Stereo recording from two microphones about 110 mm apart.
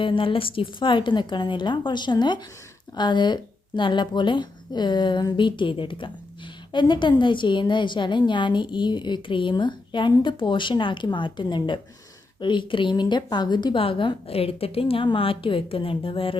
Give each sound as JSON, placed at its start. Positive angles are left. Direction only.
{"t": 0.0, "sound": "a woman's voice", "side_deg": 50}